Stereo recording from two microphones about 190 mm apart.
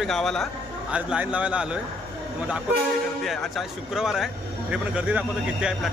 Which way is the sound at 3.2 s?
Centre (ahead or behind).